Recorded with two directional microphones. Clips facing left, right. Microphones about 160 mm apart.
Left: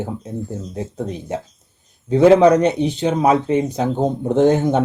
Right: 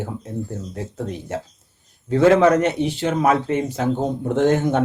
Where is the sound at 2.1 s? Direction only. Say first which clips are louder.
Left 3 dB; 15° left (ahead or behind).